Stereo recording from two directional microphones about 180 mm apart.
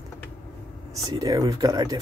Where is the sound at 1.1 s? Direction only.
20° right (ahead or behind).